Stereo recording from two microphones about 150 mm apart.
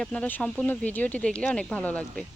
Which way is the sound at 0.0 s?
5° left (ahead or behind).